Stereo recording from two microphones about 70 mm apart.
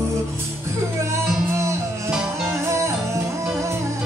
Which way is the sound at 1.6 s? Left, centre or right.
Right.